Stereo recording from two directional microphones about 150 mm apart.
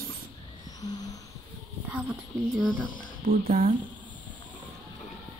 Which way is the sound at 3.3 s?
70° right (ahead or behind).